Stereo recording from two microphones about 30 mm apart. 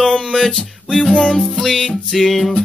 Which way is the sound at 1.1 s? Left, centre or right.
Left.